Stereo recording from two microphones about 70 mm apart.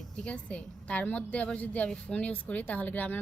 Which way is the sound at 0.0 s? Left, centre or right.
Centre.